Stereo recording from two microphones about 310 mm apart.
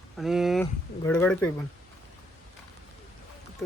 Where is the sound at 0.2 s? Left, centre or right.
Centre.